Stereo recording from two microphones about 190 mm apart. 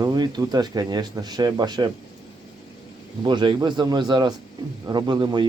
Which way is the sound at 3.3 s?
25° right (ahead or behind).